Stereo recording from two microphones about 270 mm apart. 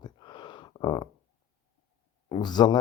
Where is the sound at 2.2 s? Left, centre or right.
Centre.